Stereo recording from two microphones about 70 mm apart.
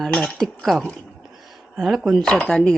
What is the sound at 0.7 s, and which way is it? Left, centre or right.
Speech, centre.